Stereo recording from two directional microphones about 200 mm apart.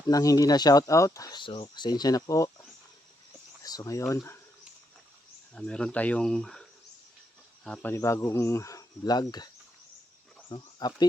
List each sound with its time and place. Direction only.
0.1 s speech: 15° left (ahead or behind)
3.6 s speech: 20° left (ahead or behind)
5.5 s speech: 5° left (ahead or behind); by 9.5 s 20° left (ahead or behind)
10.5 s speech: 20° left (ahead or behind)